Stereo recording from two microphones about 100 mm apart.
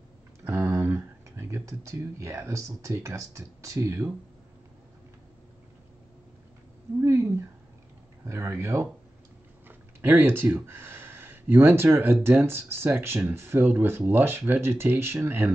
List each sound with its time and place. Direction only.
0.4 s speech: 30° right (ahead or behind)
7.0 s a sound: 25° right (ahead or behind)
8.3 s speech: 30° right (ahead or behind)